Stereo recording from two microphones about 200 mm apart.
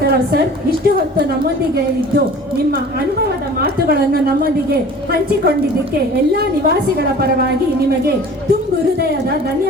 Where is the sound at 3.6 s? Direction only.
50° right (ahead or behind).